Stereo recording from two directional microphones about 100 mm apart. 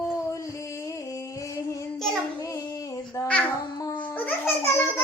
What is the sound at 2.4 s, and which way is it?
Female singing, 35° left (ahead or behind).